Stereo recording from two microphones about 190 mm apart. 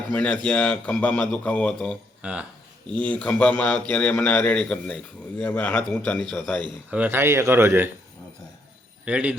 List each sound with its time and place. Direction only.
0.1 s a man's voice: 5° left (ahead or behind); by 7.9 s 10° right (ahead or behind)
9.0 s a man's voice: 5° right (ahead or behind)